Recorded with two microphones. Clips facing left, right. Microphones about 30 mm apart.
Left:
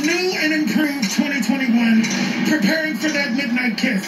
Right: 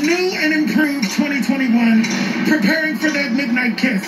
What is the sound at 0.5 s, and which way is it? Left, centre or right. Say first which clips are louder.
Speech: right 3 dB; right.